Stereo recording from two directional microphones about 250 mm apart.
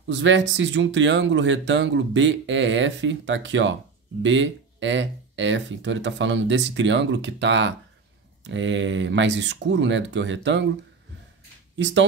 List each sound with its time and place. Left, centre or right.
0.0 s speech: right
11.7 s speech: right